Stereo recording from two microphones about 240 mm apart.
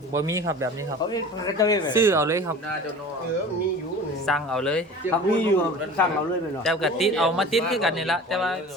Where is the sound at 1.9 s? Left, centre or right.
Centre.